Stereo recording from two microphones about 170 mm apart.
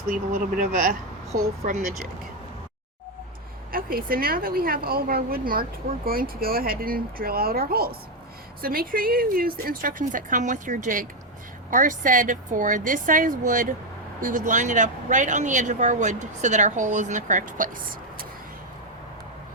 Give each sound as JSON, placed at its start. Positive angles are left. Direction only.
{"t": 0.1, "sound": "speech", "side_deg": -55}
{"t": 3.7, "sound": "a woman's voice", "side_deg": -60}